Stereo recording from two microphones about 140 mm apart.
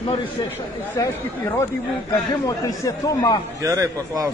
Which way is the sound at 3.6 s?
25° right (ahead or behind).